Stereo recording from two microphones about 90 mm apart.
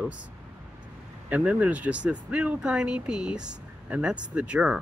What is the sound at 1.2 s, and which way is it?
Speech, 15° right (ahead or behind).